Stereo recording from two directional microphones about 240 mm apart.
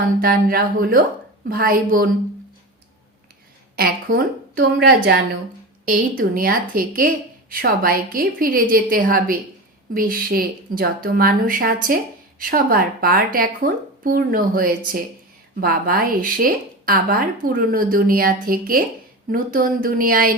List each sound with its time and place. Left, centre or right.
0.2 s a woman's voice: right
3.8 s a woman's voice: right